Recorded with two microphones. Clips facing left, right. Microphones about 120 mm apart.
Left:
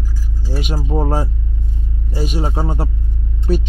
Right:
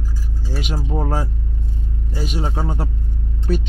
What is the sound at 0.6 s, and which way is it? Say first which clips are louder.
Speech: left 3 dB; 10° left (ahead or behind).